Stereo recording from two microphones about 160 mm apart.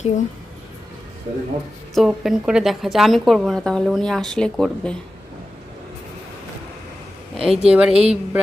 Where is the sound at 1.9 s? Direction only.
Centre (ahead or behind).